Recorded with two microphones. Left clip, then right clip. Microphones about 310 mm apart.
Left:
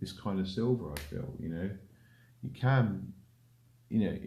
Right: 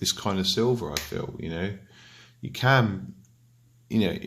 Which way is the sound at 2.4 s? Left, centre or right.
Right.